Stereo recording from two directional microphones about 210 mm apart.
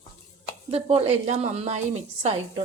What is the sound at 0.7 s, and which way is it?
Speech, 30° right (ahead or behind).